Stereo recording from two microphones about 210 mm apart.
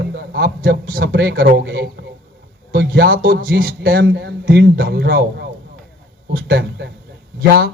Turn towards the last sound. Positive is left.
turn(degrees=-45)  # may be behind; listen again after turning